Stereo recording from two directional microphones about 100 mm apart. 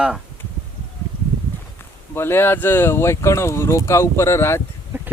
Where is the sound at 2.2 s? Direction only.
25° left (ahead or behind).